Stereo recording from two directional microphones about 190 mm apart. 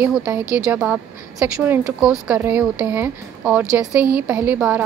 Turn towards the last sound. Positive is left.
turn(degrees=-5)  # may be behind; listen again after turning